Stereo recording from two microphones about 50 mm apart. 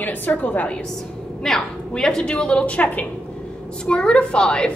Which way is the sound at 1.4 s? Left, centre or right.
Centre.